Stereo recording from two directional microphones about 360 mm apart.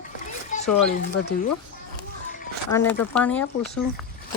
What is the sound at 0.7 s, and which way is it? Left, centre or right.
Speech, left.